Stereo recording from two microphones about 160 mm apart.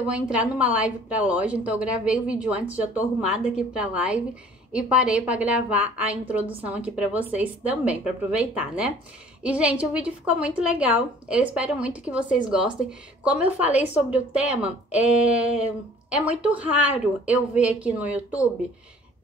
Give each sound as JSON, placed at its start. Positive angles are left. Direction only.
{"t": 0.0, "sound": "a woman's voice", "side_deg": -10}
{"t": 12.8, "sound": "speech", "side_deg": 55}
{"t": 13.6, "sound": "a woman's voice", "side_deg": -10}